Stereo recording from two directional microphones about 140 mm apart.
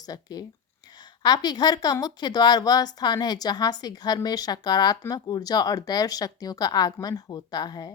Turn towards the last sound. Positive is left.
turn(degrees=30)  # may be behind; listen again after turning